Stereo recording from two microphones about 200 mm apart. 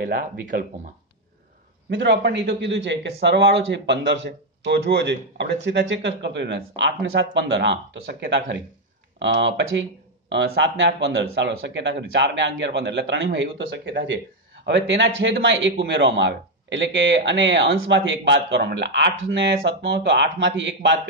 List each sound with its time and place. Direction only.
0.0 s speech: 50° right (ahead or behind)
1.9 s a man's voice: 65° right (ahead or behind)